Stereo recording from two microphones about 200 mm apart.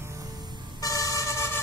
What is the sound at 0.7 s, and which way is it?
Vehicle, 15° left (ahead or behind).